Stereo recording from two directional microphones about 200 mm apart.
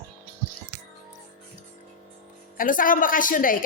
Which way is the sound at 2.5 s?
45° left (ahead or behind).